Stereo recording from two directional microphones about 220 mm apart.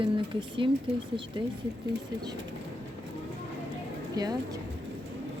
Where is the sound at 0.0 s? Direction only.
20° right (ahead or behind).